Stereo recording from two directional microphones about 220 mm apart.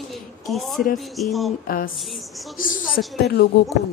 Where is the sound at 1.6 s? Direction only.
40° left (ahead or behind).